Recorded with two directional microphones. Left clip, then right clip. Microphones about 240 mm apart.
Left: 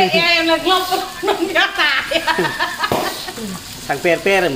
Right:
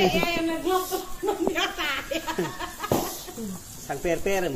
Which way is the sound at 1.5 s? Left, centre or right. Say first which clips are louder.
Left 12 dB; right.